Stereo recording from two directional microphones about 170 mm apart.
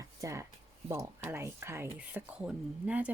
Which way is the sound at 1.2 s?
15° right (ahead or behind).